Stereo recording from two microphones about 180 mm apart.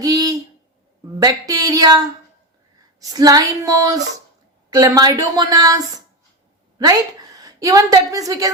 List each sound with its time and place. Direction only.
0.0 s a sound: 20° right (ahead or behind)
1.2 s a woman's voice: 20° right (ahead or behind)
3.0 s a woman's voice: 20° right (ahead or behind)